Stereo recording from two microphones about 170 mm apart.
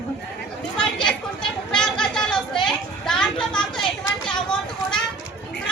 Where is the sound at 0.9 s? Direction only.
5° left (ahead or behind).